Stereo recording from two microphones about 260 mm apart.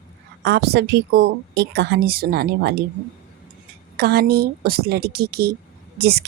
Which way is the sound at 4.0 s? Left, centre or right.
Right.